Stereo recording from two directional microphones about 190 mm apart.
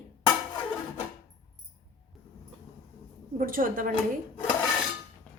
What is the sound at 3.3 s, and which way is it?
Speech, 45° right (ahead or behind).